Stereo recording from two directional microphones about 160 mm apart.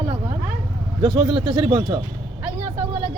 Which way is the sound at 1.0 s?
35° right (ahead or behind).